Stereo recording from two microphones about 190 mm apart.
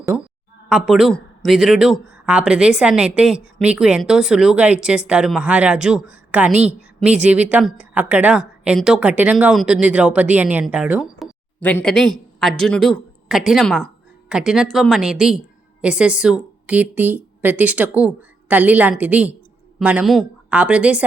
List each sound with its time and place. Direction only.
0.7 s speech: centre (ahead or behind)
6.5 s a woman's voice: 35° right (ahead or behind)
7.0 s speech: 5° right (ahead or behind)
11.6 s a woman's voice: 5° left (ahead or behind)